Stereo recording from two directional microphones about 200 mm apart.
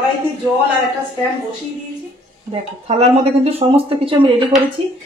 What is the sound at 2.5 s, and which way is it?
Speech, 30° right (ahead or behind).